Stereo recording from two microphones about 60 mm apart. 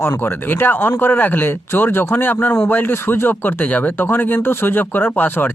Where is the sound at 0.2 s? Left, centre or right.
Left.